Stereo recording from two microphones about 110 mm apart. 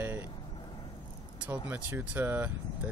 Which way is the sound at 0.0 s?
20° right (ahead or behind).